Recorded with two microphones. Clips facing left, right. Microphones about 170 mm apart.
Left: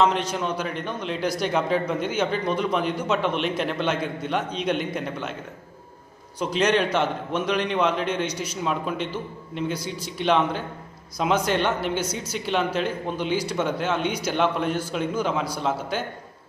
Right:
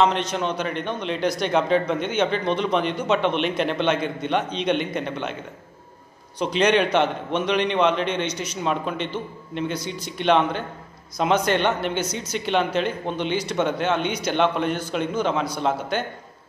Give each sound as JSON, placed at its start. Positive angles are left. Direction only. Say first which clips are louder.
{"t": 0.0, "sound": "a man's voice", "louder": "right 1 dB", "side_deg": 5}
{"t": 6.4, "sound": "a man's voice", "louder": "right 2 dB", "side_deg": 5}